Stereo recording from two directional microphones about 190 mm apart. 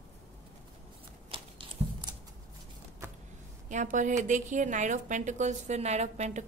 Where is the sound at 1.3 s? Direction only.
25° right (ahead or behind).